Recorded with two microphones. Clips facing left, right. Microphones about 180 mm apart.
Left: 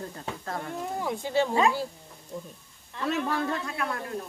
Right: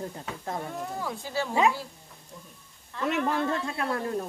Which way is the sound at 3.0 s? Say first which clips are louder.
Right 1 dB; 20° right (ahead or behind).